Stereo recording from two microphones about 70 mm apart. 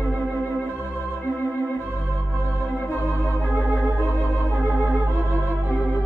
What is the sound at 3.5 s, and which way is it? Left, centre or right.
Organ, right.